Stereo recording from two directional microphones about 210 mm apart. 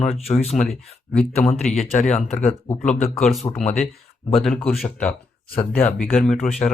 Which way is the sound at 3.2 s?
Centre (ahead or behind).